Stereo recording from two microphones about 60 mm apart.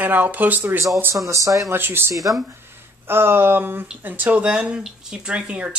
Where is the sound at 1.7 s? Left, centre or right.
Right.